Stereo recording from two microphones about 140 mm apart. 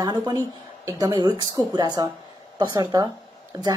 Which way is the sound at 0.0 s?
30° right (ahead or behind).